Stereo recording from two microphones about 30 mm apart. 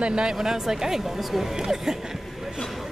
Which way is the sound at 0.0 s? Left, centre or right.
Right.